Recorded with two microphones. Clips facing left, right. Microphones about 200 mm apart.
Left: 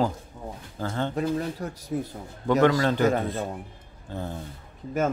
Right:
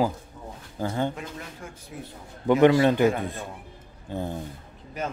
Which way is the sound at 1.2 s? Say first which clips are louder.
Left 11 dB; 35° left (ahead or behind).